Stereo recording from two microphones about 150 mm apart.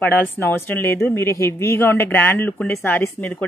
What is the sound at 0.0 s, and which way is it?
Speech, 15° left (ahead or behind).